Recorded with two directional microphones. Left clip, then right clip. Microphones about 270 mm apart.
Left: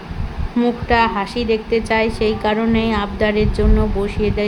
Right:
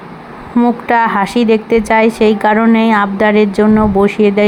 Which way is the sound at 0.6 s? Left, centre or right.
Centre.